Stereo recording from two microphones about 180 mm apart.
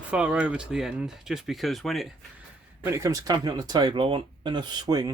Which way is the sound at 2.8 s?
15° right (ahead or behind).